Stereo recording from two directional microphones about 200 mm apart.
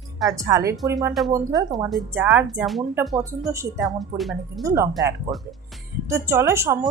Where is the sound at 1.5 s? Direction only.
Centre (ahead or behind).